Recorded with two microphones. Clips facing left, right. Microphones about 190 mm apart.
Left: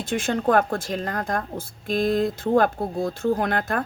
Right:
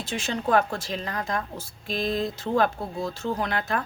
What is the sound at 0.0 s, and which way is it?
Speech, 55° left (ahead or behind).